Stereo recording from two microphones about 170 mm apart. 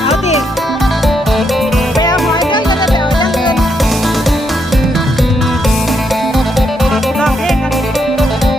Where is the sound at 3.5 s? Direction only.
Centre (ahead or behind).